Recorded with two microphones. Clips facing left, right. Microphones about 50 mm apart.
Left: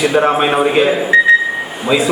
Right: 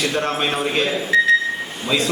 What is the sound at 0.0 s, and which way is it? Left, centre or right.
A man's voice, centre.